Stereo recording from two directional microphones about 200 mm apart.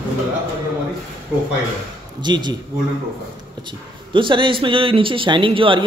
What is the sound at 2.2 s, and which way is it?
Speech, 20° right (ahead or behind).